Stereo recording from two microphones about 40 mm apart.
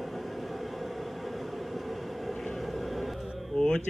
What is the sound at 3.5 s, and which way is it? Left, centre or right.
Music, left.